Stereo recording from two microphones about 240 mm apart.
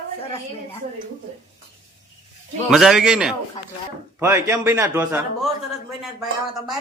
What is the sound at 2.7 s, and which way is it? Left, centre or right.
A man's voice, centre.